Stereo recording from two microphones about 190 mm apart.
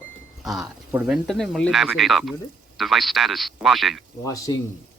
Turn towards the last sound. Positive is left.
turn(degrees=20)  # may be behind; listen again after turning